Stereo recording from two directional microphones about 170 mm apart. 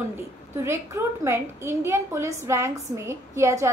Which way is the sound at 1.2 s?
15° right (ahead or behind).